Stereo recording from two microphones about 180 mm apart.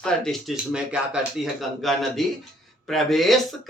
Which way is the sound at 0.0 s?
Centre (ahead or behind).